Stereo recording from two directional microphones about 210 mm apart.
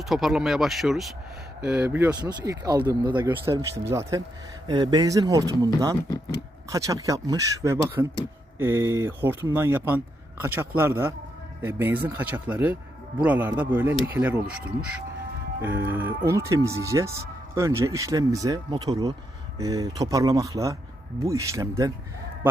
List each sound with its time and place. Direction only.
0.0 s speech: centre (ahead or behind)
2.1 s speech: 20° right (ahead or behind)